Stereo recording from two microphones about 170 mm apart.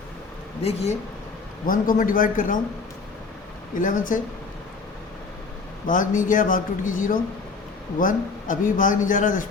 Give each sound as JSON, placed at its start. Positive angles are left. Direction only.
{"t": 0.6, "sound": "speech", "side_deg": 40}
{"t": 1.6, "sound": "a man's voice", "side_deg": 55}
{"t": 3.8, "sound": "a man's voice", "side_deg": 50}
{"t": 5.9, "sound": "a man's voice", "side_deg": 50}